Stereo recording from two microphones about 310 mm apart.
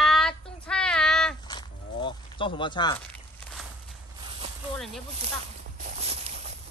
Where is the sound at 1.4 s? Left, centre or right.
Centre.